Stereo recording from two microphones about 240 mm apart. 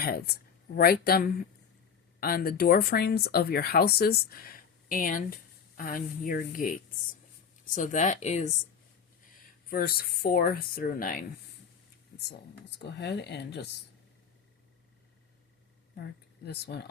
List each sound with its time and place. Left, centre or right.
0.0 s speech: left
9.6 s speech: left
12.8 s speech: left
16.5 s speech: left